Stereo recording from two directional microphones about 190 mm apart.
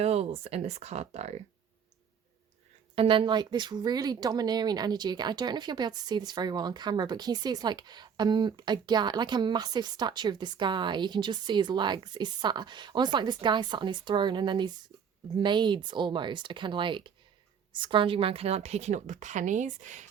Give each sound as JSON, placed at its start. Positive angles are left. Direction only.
{"t": 0.0, "sound": "a woman's voice", "side_deg": -35}
{"t": 2.9, "sound": "a woman's voice", "side_deg": -30}